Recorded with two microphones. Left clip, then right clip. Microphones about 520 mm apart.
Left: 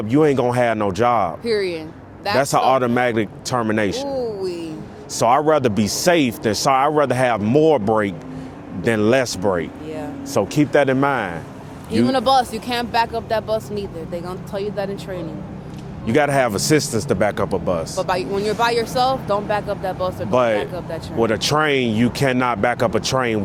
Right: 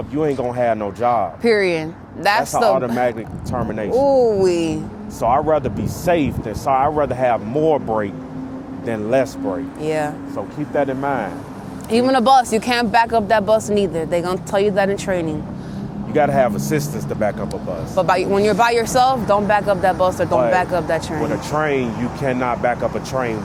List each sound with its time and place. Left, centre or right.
0.1 s speech: left
1.4 s speech: right
2.4 s speech: left
4.1 s speech: right
5.2 s speech: left
8.8 s speech: left
9.8 s speech: right
10.3 s speech: left
11.9 s speech: right
16.1 s speech: left
17.5 s speech: right
21.2 s speech: left